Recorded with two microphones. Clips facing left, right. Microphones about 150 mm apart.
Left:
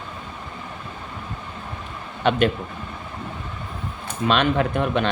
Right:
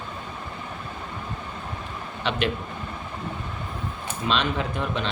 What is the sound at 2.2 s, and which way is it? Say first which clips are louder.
Speech: left 7 dB; 50° left (ahead or behind).